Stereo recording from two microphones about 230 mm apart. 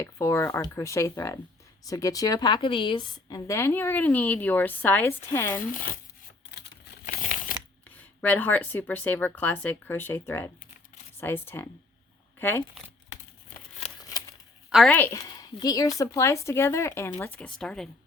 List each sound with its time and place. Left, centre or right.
0.0 s a woman's voice: centre
6.5 s crumpling: left
7.9 s a woman's voice: centre
14.0 s a sound: centre
14.7 s a woman's voice: centre